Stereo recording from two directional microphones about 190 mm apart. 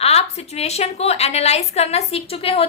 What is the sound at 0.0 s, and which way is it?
A woman's voice, 35° left (ahead or behind).